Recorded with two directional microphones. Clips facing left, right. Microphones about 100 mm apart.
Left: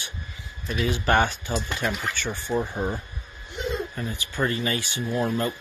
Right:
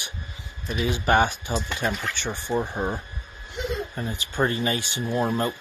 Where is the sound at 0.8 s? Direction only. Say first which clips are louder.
Right 1 dB; 15° right (ahead or behind).